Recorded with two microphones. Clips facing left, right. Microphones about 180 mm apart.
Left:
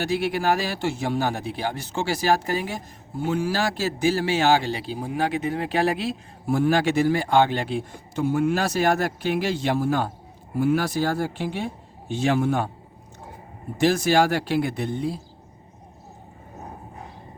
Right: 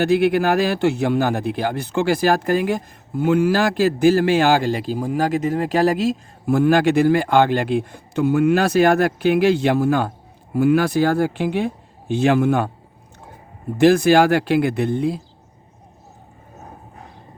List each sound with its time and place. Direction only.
0.0 s a man's voice: 55° right (ahead or behind); by 6.1 s 40° right (ahead or behind)
6.5 s speech: 55° right (ahead or behind)
13.7 s speech: 60° right (ahead or behind)